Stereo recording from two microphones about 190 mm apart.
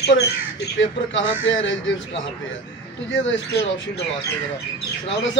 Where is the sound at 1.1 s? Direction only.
80° left.